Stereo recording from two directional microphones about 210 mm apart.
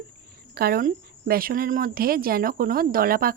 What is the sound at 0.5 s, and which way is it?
A woman's voice, 45° right (ahead or behind).